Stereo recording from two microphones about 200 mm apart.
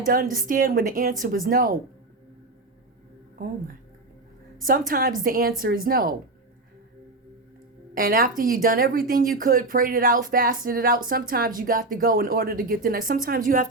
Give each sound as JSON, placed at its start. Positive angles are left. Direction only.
{"t": 0.0, "sound": "speech", "side_deg": -45}
{"t": 4.9, "sound": "speech", "side_deg": -45}
{"t": 7.9, "sound": "speech", "side_deg": -45}